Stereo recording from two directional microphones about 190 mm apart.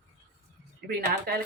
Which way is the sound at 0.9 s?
55° right (ahead or behind).